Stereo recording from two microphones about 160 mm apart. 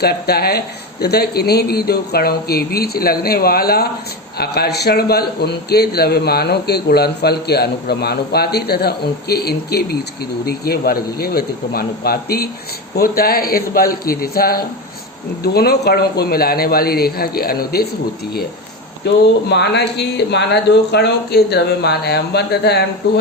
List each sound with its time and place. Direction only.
0.0 s a man's voice: 85° left; by 17.8 s 70° left (ahead or behind)
19.0 s speech: 90° left